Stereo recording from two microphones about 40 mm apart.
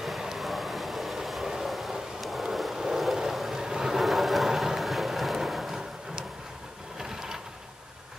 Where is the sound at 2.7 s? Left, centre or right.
Centre.